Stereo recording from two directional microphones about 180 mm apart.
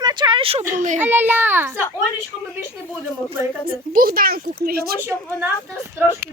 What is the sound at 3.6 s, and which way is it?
A woman's voice, 50° right (ahead or behind).